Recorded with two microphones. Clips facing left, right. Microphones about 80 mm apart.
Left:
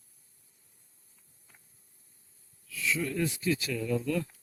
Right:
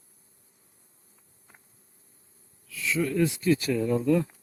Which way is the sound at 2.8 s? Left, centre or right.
Right.